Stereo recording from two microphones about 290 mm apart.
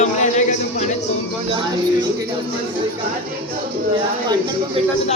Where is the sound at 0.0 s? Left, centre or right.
Left.